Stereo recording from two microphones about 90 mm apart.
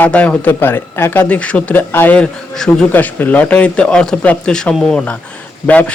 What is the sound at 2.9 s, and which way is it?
A man's voice, 20° left (ahead or behind).